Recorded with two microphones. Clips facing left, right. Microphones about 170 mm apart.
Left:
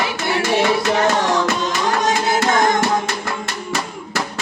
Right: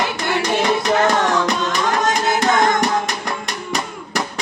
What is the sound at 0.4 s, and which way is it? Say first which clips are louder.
Music: left 2 dB; 15° right (ahead or behind).